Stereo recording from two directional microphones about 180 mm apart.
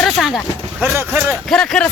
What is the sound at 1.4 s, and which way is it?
Speech, 5° left (ahead or behind).